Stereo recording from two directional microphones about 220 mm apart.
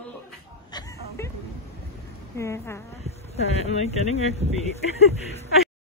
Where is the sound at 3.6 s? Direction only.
30° left (ahead or behind).